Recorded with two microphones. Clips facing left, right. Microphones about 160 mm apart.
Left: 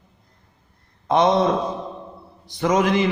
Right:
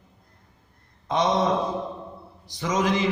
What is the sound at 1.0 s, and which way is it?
Speech, 60° left (ahead or behind).